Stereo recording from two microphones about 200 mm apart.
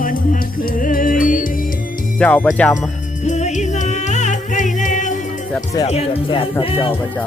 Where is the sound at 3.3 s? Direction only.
35° left (ahead or behind).